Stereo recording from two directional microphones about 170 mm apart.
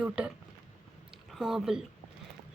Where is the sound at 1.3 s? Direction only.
Centre (ahead or behind).